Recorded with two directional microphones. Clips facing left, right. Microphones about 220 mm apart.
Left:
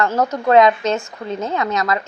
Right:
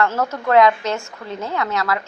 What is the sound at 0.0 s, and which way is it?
A woman's voice, 15° left (ahead or behind).